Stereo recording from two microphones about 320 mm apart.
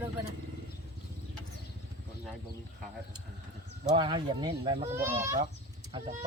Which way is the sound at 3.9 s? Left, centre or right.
Centre.